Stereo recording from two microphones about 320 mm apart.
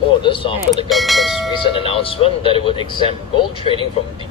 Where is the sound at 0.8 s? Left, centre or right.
Centre.